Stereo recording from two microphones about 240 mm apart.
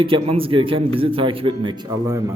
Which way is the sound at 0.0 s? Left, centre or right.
Right.